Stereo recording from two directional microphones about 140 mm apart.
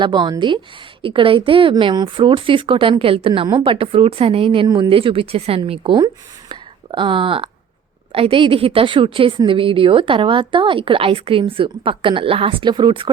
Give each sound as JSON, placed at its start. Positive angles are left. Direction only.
{"t": 0.0, "sound": "speech", "side_deg": -35}